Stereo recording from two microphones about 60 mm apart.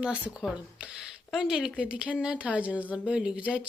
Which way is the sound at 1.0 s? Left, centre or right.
Centre.